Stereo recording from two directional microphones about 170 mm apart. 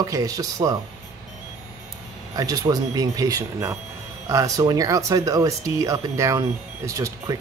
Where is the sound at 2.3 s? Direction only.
20° right (ahead or behind).